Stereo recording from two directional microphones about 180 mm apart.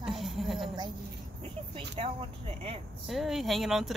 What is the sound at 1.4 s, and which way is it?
Speech, 35° right (ahead or behind).